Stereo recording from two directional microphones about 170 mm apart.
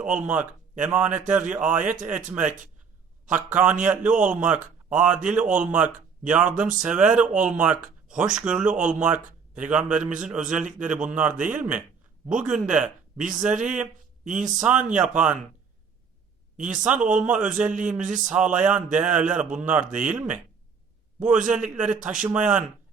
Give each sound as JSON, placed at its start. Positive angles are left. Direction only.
{"t": 0.0, "sound": "a man's voice", "side_deg": -5}
{"t": 16.6, "sound": "speech", "side_deg": -5}